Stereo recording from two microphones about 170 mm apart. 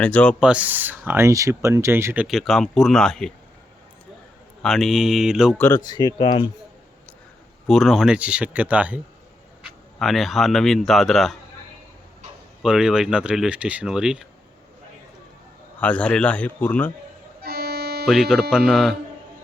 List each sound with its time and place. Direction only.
0.0 s a man's voice: 10° left (ahead or behind)
0.3 s speech: 5° right (ahead or behind)
2.2 s speech: centre (ahead or behind)
4.6 s speech: 5° left (ahead or behind)
5.5 s a man's voice: 15° left (ahead or behind)
5.8 s speech: 25° left (ahead or behind)
7.7 s speech: centre (ahead or behind)
12.6 s speech: 5° right (ahead or behind)
15.8 s a man's voice: 5° left (ahead or behind)
17.4 s accordion: 65° right (ahead or behind)
18.1 s speech: 5° right (ahead or behind)